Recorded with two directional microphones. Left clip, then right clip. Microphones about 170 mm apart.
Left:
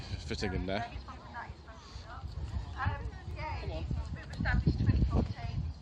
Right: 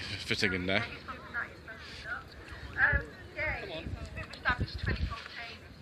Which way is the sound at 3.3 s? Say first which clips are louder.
Right 6 dB; 55° left (ahead or behind).